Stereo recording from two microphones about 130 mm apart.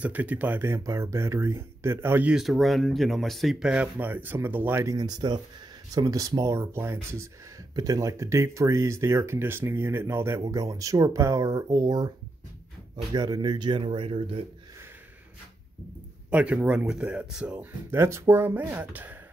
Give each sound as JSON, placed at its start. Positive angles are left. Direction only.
{"t": 0.0, "sound": "speech", "side_deg": -15}
{"t": 2.3, "sound": "speech", "side_deg": 0}
{"t": 4.9, "sound": "speech", "side_deg": -30}
{"t": 16.3, "sound": "speech", "side_deg": -10}
{"t": 17.9, "sound": "speech", "side_deg": -20}